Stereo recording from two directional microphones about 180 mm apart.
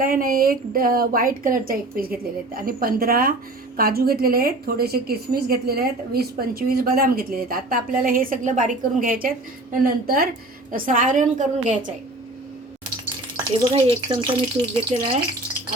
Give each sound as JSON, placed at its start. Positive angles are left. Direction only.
{"t": 0.0, "sound": "a woman's voice", "side_deg": -50}
{"t": 13.7, "sound": "speech", "side_deg": -30}